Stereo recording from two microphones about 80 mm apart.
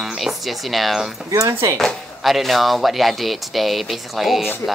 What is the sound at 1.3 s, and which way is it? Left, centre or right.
Speech, right.